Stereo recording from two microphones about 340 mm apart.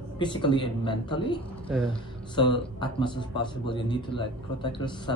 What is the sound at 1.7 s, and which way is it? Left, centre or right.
Speech, centre.